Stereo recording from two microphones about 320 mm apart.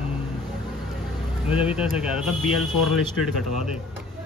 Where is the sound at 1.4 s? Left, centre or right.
Centre.